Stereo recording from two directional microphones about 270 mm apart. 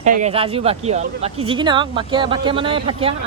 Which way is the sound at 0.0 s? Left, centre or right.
Right.